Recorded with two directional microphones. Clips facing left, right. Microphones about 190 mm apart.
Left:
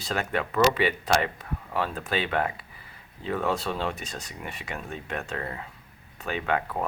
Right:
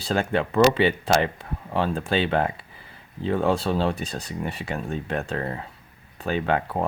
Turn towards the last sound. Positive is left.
turn(degrees=-30)  # may be behind; listen again after turning